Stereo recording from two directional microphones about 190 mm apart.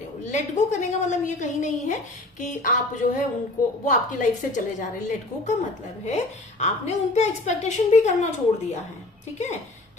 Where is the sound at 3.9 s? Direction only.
40° left (ahead or behind).